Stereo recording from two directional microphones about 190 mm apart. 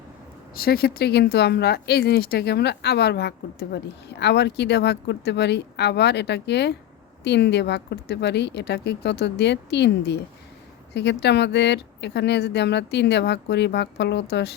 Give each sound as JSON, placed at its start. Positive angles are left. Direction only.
{"t": 0.5, "sound": "speech", "side_deg": 55}